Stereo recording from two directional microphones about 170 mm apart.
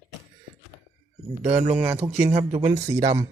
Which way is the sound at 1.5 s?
10° right (ahead or behind).